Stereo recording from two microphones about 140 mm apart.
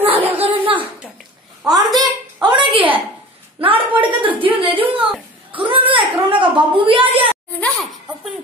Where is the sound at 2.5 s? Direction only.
40° right (ahead or behind).